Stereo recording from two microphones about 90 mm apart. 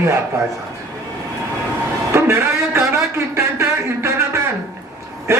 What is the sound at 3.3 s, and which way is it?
Speech, 30° right (ahead or behind).